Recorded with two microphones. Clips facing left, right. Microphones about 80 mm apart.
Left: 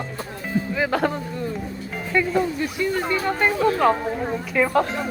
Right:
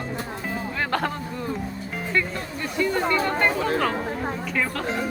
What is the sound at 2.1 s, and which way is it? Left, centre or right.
Speech, centre.